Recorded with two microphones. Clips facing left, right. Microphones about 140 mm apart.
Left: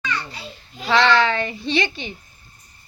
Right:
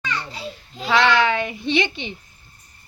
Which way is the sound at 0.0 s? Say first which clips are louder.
Left 1 dB; 25° right (ahead or behind).